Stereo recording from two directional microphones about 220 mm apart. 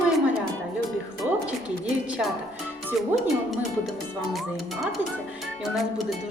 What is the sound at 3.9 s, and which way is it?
Speech, centre (ahead or behind).